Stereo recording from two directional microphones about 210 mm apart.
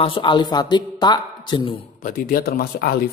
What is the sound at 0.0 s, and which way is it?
Speech, 25° left (ahead or behind).